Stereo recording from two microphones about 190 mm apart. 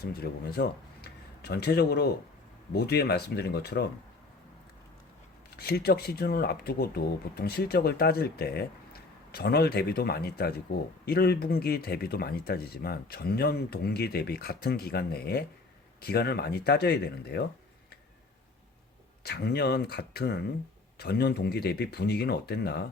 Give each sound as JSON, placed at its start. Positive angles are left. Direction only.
{"t": 0.0, "sound": "speech", "side_deg": 55}
{"t": 5.5, "sound": "speech", "side_deg": 55}
{"t": 19.2, "sound": "speech", "side_deg": 55}